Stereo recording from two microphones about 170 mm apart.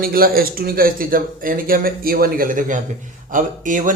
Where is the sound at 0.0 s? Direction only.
60° right (ahead or behind).